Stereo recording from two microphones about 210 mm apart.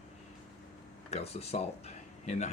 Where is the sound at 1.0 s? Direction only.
30° left (ahead or behind).